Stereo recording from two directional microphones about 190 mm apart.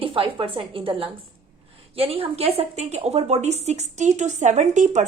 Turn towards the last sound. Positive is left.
turn(degrees=-40)  # may be behind; listen again after turning